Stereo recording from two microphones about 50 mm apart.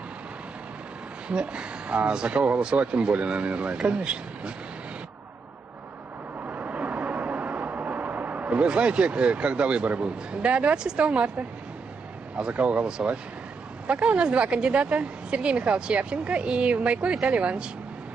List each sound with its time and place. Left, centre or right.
1.3 s a woman's voice: centre
6.4 s vehicle: right
10.8 s a woman's voice: right